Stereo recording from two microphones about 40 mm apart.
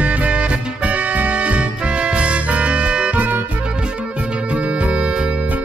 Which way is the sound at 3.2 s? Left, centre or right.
Right.